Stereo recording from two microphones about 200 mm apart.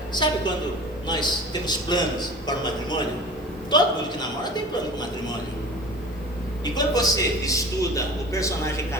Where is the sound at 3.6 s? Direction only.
20° left (ahead or behind).